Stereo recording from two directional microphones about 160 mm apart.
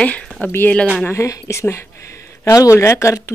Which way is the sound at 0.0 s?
10° left (ahead or behind).